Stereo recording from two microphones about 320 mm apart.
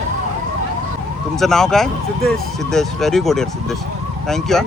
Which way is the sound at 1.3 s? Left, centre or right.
Centre.